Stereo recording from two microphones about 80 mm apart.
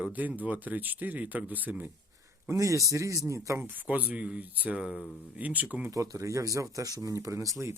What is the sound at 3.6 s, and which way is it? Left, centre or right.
Speech, right.